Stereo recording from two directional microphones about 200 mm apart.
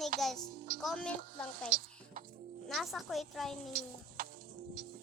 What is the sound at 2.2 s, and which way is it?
Music, 45° right (ahead or behind).